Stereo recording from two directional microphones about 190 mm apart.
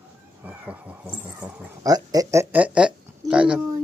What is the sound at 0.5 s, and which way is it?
Speech, 10° right (ahead or behind).